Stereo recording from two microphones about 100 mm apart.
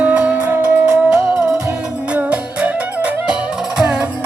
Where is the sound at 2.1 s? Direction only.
15° right (ahead or behind).